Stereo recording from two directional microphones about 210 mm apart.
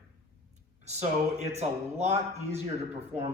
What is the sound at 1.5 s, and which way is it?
Speech, 30° right (ahead or behind).